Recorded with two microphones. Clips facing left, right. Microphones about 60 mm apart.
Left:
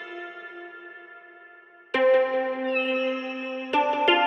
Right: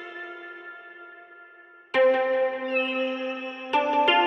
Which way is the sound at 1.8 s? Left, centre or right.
Centre.